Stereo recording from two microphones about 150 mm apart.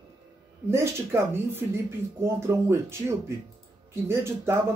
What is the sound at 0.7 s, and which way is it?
Speech, 15° right (ahead or behind).